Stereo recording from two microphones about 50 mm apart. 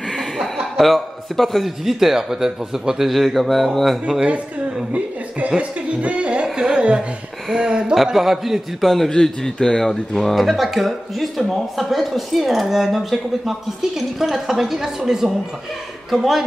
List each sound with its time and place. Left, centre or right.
0.2 s speech: centre
5.6 s speech: right
7.9 s speech: centre